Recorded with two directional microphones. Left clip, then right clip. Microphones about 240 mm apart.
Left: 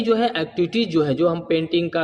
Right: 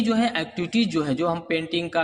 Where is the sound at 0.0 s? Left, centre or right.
Right.